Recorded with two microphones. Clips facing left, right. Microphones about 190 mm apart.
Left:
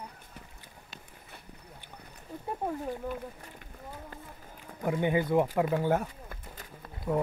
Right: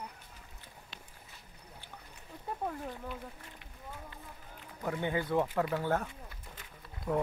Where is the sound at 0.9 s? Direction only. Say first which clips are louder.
Left 4 dB; 60° left (ahead or behind).